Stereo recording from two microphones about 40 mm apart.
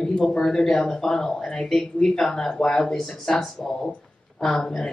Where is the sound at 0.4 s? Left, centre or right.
Centre.